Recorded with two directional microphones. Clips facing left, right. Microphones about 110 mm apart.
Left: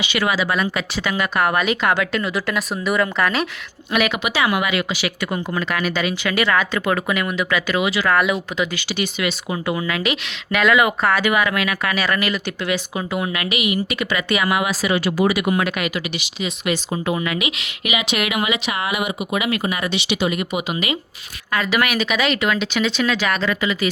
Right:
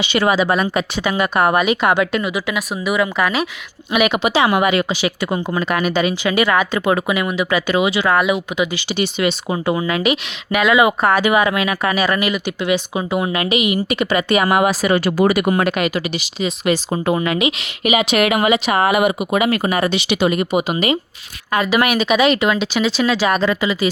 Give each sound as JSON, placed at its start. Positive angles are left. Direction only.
{"t": 0.0, "sound": "speech", "side_deg": -30}
{"t": 0.9, "sound": "speech", "side_deg": -20}
{"t": 4.2, "sound": "speech", "side_deg": -30}
{"t": 11.9, "sound": "speech", "side_deg": -20}
{"t": 14.3, "sound": "speech", "side_deg": -40}
{"t": 15.7, "sound": "speech", "side_deg": -35}
{"t": 21.5, "sound": "speech", "side_deg": -20}